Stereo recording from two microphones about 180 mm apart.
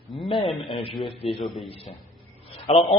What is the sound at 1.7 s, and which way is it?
A man's voice, 35° left (ahead or behind).